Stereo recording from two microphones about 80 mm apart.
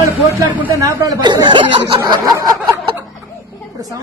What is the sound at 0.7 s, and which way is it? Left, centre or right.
Speech, right.